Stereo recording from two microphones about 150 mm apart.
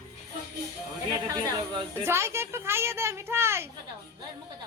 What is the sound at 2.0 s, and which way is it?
Speech, 15° right (ahead or behind).